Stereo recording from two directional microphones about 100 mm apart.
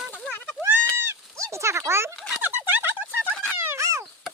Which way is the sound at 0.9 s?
25° right (ahead or behind).